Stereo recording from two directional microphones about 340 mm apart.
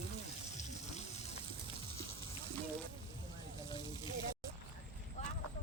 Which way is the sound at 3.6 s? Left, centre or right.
Centre.